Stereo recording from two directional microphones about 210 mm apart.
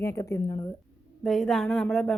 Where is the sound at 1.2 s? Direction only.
Centre (ahead or behind).